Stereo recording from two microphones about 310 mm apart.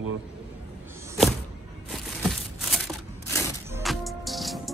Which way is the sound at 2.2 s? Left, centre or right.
Centre.